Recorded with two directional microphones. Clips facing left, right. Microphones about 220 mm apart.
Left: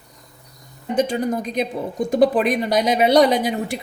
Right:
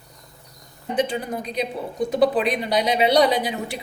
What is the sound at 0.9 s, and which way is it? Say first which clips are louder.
A woman's voice: left 4 dB; 45° left (ahead or behind).